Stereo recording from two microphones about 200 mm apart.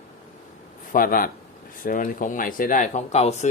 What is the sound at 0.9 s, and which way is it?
Speech, 45° left (ahead or behind).